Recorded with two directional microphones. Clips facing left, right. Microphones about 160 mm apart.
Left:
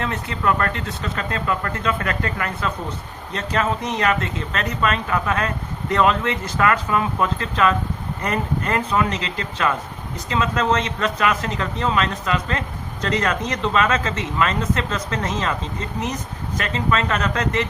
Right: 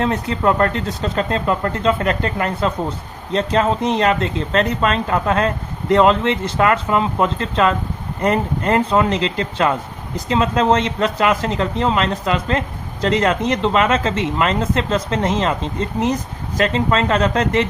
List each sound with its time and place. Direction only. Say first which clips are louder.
0.0 s speech: right 6 dB; 35° right (ahead or behind)